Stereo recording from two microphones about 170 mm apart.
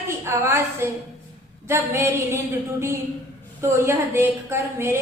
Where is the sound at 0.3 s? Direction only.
15° right (ahead or behind).